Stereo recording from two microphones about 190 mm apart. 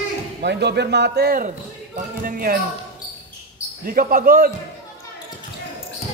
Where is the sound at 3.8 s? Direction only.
50° right (ahead or behind).